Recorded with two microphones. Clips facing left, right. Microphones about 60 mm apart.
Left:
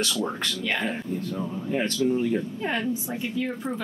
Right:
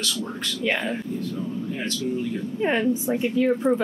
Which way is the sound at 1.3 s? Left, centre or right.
Left.